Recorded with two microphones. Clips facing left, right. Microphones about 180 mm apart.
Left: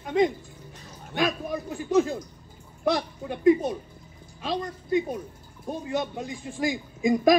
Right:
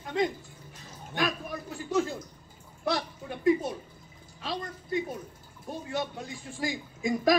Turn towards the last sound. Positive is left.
turn(degrees=20)  # may be behind; listen again after turning